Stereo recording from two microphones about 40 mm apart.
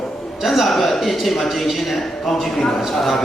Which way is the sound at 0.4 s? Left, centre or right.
Centre.